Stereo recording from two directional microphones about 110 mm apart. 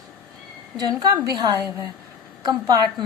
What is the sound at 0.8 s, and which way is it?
A woman's voice, 35° right (ahead or behind).